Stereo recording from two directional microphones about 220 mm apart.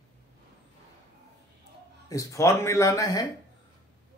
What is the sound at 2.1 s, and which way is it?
Speech, 15° left (ahead or behind).